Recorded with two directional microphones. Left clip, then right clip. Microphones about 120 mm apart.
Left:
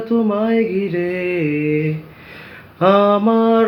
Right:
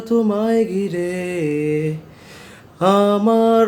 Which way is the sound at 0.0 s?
45° right (ahead or behind).